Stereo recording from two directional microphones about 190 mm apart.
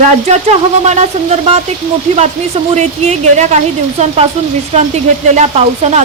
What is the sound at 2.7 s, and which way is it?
Speech, 35° right (ahead or behind).